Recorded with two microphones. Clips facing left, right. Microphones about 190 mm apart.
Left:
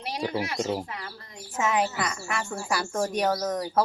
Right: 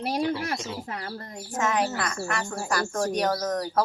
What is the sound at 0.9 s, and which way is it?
Speech, 50° right (ahead or behind).